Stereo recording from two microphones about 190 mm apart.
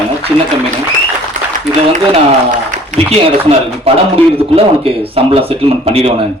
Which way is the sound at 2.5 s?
40° right (ahead or behind).